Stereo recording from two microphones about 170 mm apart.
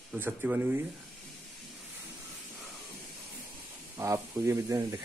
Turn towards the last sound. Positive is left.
turn(degrees=-20)  # may be behind; listen again after turning